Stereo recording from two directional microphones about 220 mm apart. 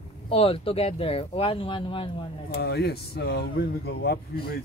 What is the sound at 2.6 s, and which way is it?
Speech, 45° left (ahead or behind).